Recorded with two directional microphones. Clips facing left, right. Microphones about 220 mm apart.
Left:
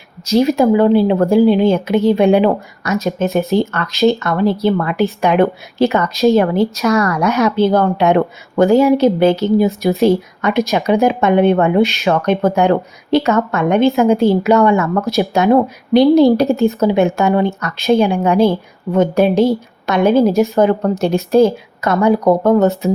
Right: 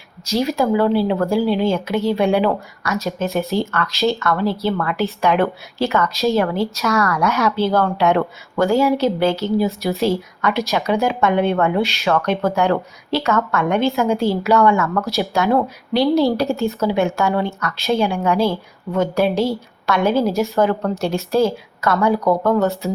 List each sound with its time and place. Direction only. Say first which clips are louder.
0.3 s speech: left 6 dB; 20° left (ahead or behind)